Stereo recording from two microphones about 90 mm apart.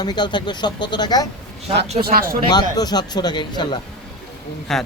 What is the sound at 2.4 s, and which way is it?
Speech, 50° left (ahead or behind).